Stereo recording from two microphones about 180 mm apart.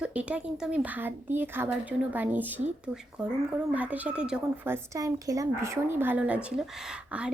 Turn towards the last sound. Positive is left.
turn(degrees=-5)  # may be behind; listen again after turning